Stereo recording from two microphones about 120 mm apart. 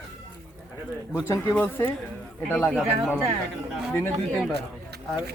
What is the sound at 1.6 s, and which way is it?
Speech, 20° left (ahead or behind).